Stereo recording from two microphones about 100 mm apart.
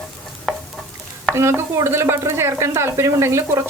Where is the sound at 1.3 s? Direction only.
25° right (ahead or behind).